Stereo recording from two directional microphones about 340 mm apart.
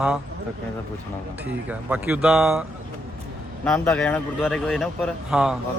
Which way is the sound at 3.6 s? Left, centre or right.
Centre.